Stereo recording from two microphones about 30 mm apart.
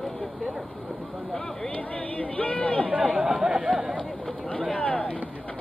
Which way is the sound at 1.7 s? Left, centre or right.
Left.